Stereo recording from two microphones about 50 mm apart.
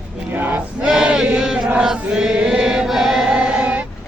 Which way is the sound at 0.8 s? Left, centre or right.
Centre.